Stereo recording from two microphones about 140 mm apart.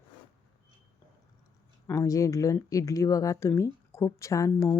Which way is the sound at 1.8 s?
25° left (ahead or behind).